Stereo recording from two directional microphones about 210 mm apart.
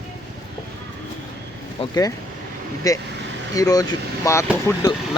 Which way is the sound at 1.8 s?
15° left (ahead or behind).